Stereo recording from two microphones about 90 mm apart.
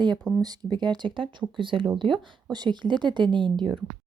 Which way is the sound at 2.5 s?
55° right (ahead or behind).